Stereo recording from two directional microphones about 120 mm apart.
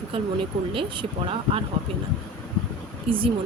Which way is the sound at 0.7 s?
50° right (ahead or behind).